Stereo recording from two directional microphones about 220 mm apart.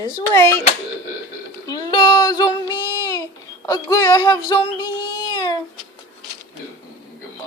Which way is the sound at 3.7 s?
15° left (ahead or behind).